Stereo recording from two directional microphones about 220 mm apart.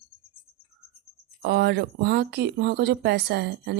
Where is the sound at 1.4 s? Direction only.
50° right (ahead or behind).